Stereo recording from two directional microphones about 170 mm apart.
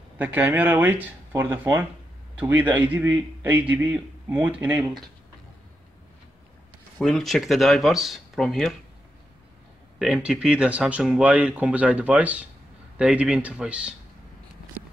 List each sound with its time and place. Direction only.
0.2 s speech: 10° right (ahead or behind)
7.0 s speech: centre (ahead or behind)
9.9 s speech: 5° right (ahead or behind)